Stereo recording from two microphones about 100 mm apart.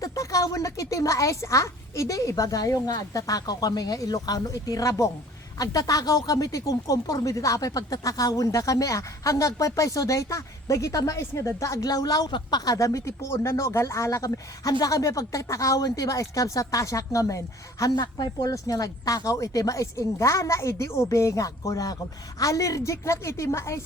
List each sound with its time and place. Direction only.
0.0 s a woman's voice: 35° left (ahead or behind)